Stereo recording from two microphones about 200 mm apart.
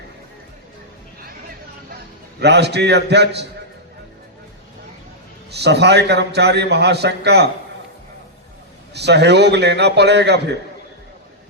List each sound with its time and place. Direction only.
2.4 s a man's voice: 55° right (ahead or behind)
5.5 s a man's voice: 55° right (ahead or behind)
8.9 s a man's voice: 55° right (ahead or behind)